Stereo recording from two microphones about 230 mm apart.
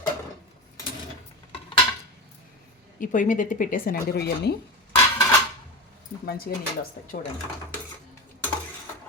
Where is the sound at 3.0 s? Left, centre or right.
Left.